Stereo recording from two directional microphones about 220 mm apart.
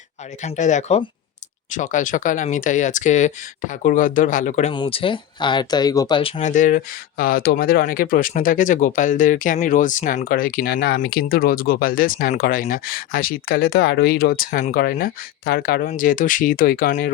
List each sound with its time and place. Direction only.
0.4 s speech: 35° left (ahead or behind)
4.7 s speech: 25° left (ahead or behind); by 17.1 s 40° left (ahead or behind)